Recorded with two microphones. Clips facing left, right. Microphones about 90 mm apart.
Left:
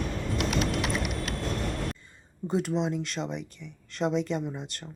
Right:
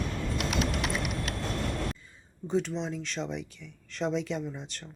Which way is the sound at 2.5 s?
5° left (ahead or behind).